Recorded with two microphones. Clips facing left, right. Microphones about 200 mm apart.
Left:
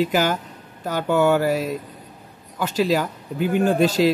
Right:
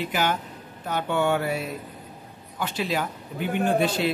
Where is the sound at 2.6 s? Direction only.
40° left (ahead or behind).